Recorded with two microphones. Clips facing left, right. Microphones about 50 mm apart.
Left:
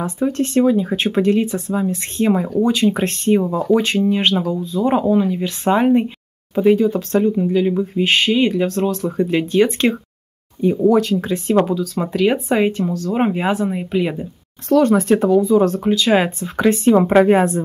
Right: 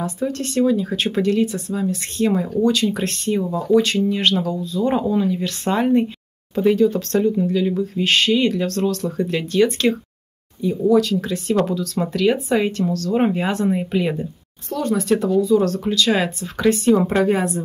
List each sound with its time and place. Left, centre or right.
0.0 s speech: left
10.6 s speech: left
11.6 s speech: centre
14.7 s speech: left
15.0 s speech: left